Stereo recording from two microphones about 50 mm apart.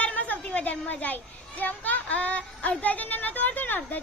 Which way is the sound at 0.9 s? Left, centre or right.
Left.